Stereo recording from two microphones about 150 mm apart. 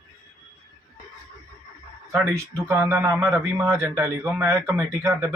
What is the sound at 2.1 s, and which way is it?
Speech, 15° right (ahead or behind).